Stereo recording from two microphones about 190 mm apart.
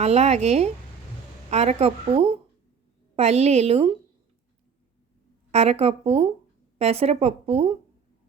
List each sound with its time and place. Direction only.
0.0 s a woman's voice: 35° right (ahead or behind)
5.5 s a woman's voice: 35° right (ahead or behind)